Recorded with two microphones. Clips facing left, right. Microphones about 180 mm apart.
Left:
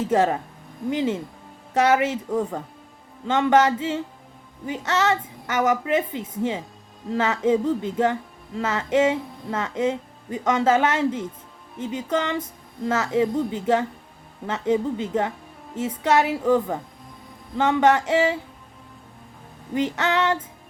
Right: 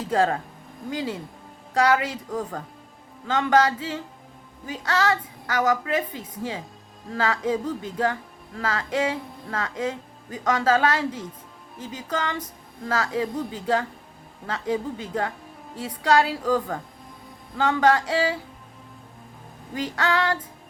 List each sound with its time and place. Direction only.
0.0 s speech: 25° left (ahead or behind)
19.7 s speech: 25° left (ahead or behind)